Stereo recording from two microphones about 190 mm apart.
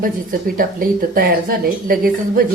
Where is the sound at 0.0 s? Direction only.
50° right (ahead or behind).